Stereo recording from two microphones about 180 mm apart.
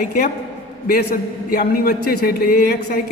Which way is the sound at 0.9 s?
60° left (ahead or behind).